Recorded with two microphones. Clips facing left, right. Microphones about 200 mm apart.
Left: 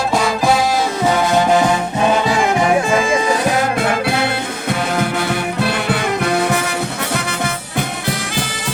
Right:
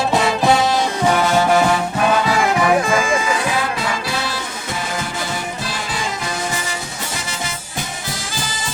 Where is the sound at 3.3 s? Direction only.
45° left (ahead or behind); by 8.7 s 60° left (ahead or behind).